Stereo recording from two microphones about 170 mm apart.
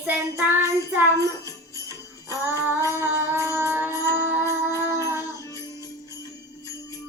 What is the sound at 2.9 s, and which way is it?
Music, 15° right (ahead or behind).